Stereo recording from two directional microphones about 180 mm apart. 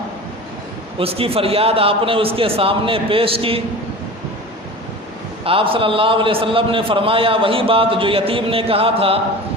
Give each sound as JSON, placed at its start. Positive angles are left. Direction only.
{"t": 0.9, "sound": "a man's voice", "side_deg": -30}
{"t": 5.5, "sound": "a man's voice", "side_deg": -30}